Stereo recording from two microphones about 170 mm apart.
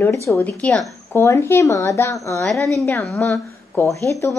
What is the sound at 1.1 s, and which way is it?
A woman's voice, 15° left (ahead or behind).